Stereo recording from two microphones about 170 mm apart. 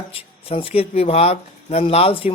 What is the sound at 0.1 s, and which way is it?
Speech, 35° left (ahead or behind).